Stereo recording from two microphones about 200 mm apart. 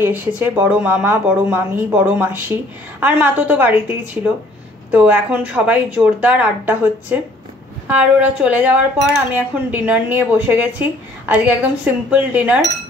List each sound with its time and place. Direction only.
0.0 s speech: 10° right (ahead or behind)